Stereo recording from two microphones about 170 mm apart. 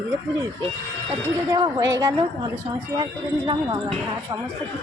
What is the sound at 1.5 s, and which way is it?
Speech, 20° right (ahead or behind).